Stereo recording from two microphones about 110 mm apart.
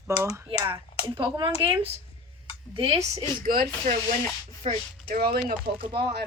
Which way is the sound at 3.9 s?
90° right.